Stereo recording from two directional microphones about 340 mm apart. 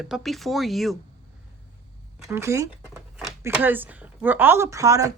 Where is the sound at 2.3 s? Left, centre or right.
Centre.